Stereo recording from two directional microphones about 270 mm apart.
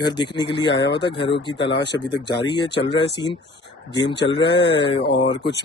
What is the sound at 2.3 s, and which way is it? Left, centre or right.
Speech, centre.